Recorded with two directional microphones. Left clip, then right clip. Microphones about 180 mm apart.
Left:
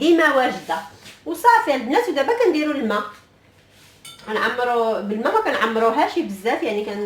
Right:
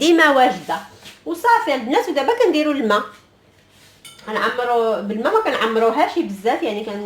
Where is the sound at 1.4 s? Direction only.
25° right (ahead or behind).